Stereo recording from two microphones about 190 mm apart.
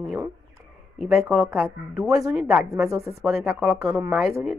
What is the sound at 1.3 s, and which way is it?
Speech, 15° right (ahead or behind).